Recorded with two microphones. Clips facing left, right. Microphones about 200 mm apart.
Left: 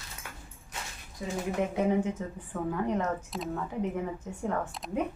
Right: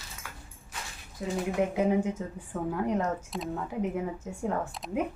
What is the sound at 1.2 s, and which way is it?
Speech, centre (ahead or behind).